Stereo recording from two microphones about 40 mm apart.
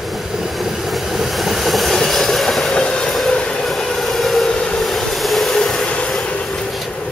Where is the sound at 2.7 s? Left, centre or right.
Left.